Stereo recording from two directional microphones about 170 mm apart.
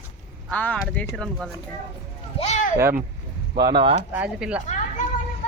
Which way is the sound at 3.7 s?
35° right (ahead or behind).